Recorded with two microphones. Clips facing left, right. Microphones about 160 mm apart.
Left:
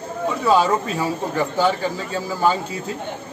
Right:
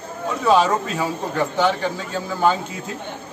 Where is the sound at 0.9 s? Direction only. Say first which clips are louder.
Left 1 dB; 5° left (ahead or behind).